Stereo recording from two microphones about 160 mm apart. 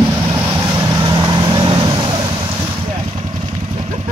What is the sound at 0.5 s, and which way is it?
Vehicle, 20° right (ahead or behind).